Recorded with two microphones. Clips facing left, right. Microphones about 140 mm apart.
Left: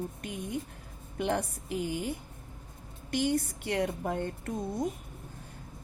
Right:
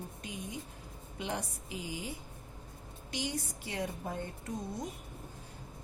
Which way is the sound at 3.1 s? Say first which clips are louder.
Left 9 dB; 55° left (ahead or behind).